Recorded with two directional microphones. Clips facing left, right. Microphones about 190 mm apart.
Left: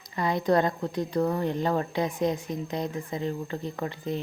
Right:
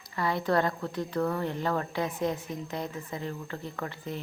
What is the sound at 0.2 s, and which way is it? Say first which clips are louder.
A woman's voice: left 3 dB; 15° left (ahead or behind).